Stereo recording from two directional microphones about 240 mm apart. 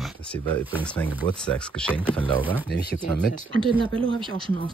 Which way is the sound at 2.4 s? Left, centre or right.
Centre.